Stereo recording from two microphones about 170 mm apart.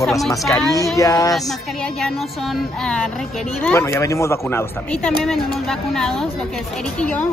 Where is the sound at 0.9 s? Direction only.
20° left (ahead or behind).